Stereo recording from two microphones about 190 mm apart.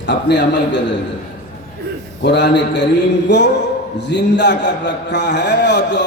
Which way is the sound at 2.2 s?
65° left (ahead or behind).